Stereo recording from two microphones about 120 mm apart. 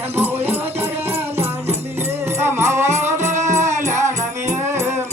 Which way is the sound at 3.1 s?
80° right.